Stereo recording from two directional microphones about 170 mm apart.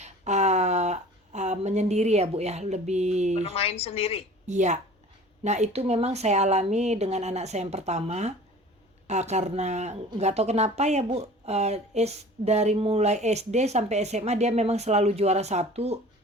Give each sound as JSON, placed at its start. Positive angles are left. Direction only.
{"t": 0.0, "sound": "a sound", "side_deg": -40}
{"t": 3.5, "sound": "a woman's voice", "side_deg": 35}
{"t": 4.4, "sound": "a woman's voice", "side_deg": -45}